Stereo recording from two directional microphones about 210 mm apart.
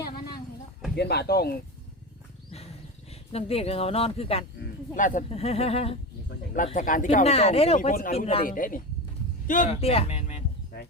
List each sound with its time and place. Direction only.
0.9 s speech: 50° left (ahead or behind)
3.1 s speech: 30° left (ahead or behind)
6.7 s speech: 40° left (ahead or behind)
8.4 s speech: 40° left (ahead or behind)